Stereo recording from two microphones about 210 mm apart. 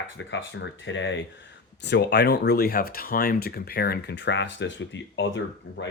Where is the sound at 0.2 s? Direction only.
65° left (ahead or behind).